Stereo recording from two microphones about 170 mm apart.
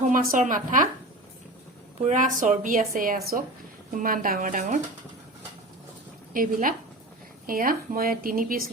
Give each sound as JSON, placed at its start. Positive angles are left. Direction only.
{"t": 0.1, "sound": "a woman's voice", "side_deg": -55}
{"t": 2.0, "sound": "a woman's voice", "side_deg": -50}
{"t": 6.3, "sound": "a woman's voice", "side_deg": -55}